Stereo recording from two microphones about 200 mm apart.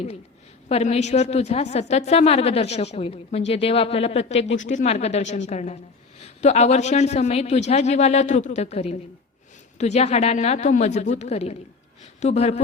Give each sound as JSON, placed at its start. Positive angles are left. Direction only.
{"t": 0.7, "sound": "a woman's voice", "side_deg": 35}